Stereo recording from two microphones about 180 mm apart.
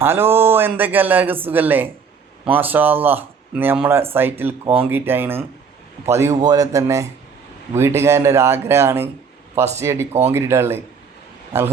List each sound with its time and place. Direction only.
0.0 s speech: 15° right (ahead or behind)